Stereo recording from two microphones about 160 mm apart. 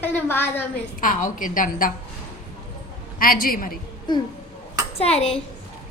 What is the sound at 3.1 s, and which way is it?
Speech, 65° left (ahead or behind).